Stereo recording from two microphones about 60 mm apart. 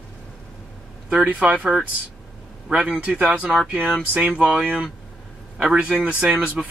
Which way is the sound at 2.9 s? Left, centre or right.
Right.